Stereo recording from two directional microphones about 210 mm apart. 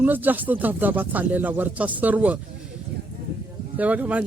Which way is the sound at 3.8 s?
5° right (ahead or behind).